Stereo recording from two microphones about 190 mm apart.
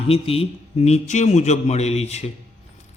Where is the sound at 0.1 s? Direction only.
30° left (ahead or behind).